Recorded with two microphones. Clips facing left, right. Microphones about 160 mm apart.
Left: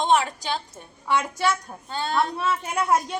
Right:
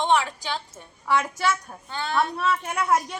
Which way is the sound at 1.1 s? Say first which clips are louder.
Even; centre (ahead or behind).